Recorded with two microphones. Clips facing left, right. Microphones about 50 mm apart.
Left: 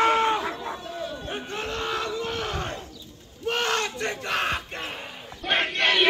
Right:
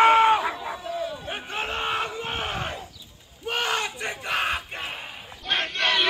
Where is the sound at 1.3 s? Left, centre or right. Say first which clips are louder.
Right 1 dB; centre.